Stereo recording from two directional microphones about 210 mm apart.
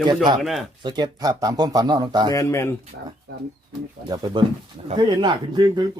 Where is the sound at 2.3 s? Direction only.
15° left (ahead or behind).